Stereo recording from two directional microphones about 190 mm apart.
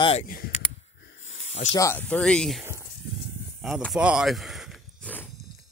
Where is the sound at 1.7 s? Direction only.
15° left (ahead or behind).